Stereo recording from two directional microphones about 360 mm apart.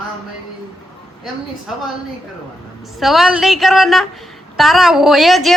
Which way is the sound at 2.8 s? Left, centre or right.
Centre.